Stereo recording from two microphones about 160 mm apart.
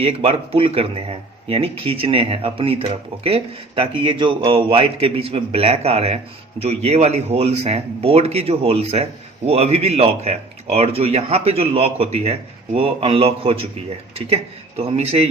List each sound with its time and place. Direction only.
0.0 s speech: 40° right (ahead or behind)